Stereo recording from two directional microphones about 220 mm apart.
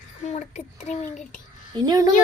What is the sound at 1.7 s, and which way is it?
Speech, 15° right (ahead or behind).